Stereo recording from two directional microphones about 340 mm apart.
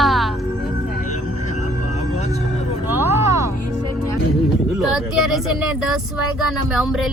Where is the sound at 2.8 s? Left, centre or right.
Centre.